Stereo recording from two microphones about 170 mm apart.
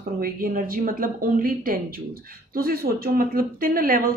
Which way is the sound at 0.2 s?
55° right (ahead or behind).